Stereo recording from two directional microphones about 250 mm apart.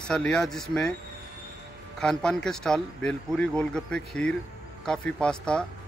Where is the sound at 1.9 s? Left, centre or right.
Centre.